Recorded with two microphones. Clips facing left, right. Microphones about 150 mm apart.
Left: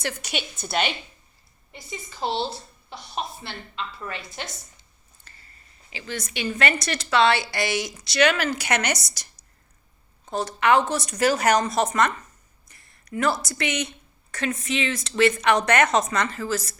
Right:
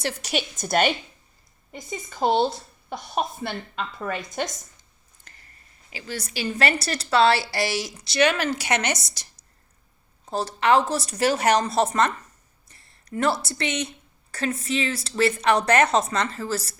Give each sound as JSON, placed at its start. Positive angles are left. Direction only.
{"t": 0.0, "sound": "a woman's voice", "side_deg": -35}
{"t": 5.9, "sound": "a woman's voice", "side_deg": -40}
{"t": 10.2, "sound": "a woman's voice", "side_deg": -30}